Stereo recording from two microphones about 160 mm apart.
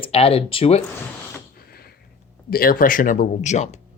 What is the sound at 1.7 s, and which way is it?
Sniff, 75° left (ahead or behind).